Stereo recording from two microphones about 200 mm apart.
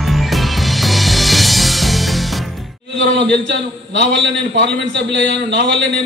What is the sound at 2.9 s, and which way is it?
A man's voice, 60° right (ahead or behind).